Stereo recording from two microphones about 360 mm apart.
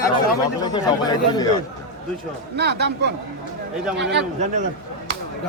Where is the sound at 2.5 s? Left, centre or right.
Right.